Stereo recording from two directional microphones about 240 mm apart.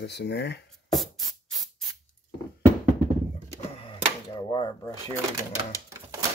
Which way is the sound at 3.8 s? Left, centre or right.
Centre.